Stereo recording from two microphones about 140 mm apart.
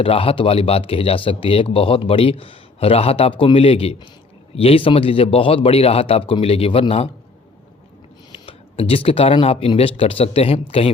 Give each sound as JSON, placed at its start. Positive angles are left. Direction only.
{"t": 0.0, "sound": "a man's voice", "side_deg": 40}
{"t": 8.3, "sound": "speech", "side_deg": 40}